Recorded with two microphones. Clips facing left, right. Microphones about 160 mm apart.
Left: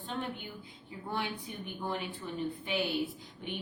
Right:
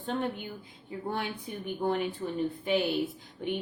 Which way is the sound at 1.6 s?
50° right (ahead or behind).